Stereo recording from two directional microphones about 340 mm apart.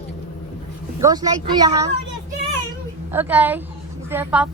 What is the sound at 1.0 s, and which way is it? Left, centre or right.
Speech, centre.